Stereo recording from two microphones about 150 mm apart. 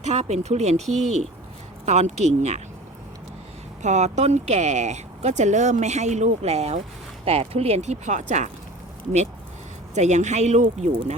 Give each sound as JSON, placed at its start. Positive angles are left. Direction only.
{"t": 0.0, "sound": "speech", "side_deg": -50}
{"t": 3.8, "sound": "speech", "side_deg": -50}
{"t": 9.9, "sound": "speech", "side_deg": -50}